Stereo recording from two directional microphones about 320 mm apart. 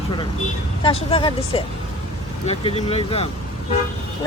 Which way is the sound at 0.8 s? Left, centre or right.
Centre.